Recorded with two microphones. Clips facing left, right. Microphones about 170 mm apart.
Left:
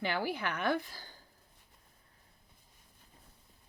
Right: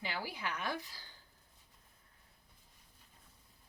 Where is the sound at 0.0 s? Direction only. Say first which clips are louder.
Left 7 dB; 60° left (ahead or behind).